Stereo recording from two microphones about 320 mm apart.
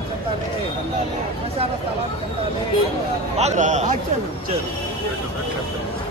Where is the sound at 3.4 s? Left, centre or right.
Right.